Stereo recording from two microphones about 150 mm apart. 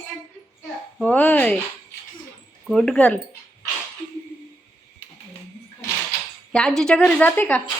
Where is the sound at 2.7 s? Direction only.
5° left (ahead or behind).